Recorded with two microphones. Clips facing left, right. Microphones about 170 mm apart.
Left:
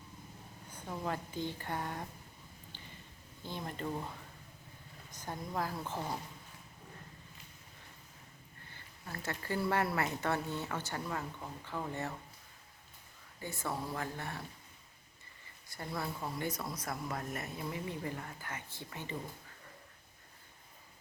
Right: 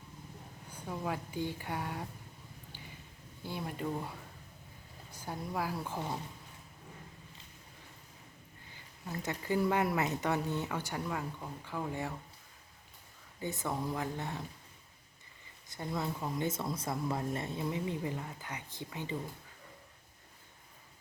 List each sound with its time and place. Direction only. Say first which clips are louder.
0.7 s speech: right 1 dB; 5° right (ahead or behind)
3.4 s speech: right 2 dB; 10° right (ahead or behind)
5.1 s speech: right 1 dB; 10° right (ahead or behind)
8.7 s speech: right 5 dB; 15° right (ahead or behind)
13.4 s speech: right 3 dB; 20° right (ahead or behind)
15.7 s speech: right 3 dB; 20° right (ahead or behind)